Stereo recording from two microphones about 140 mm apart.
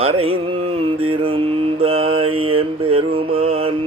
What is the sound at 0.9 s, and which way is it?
Mantra, 40° right (ahead or behind).